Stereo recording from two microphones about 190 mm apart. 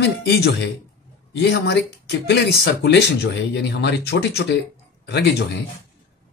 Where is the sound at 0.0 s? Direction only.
60° left (ahead or behind).